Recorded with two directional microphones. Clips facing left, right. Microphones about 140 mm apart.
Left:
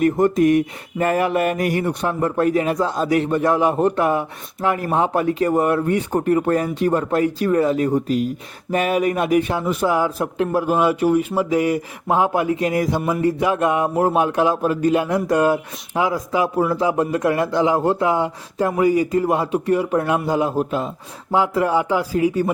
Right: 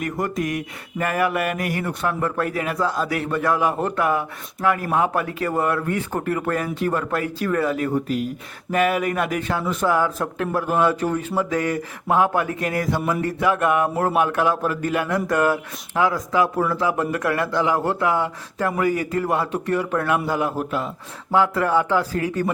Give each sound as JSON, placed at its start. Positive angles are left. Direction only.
{"t": 0.0, "sound": "mantra", "side_deg": 25}
{"t": 8.7, "sound": "a man's voice", "side_deg": 25}
{"t": 13.2, "sound": "mantra", "side_deg": 20}
{"t": 18.8, "sound": "a man's voice", "side_deg": 15}